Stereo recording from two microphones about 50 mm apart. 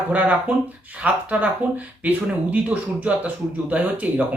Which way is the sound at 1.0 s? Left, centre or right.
Right.